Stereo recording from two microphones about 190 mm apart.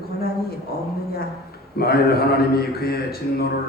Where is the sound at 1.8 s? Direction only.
55° left (ahead or behind).